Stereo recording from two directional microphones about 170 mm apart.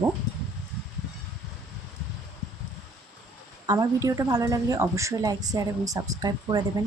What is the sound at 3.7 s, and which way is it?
A woman's voice, 20° right (ahead or behind).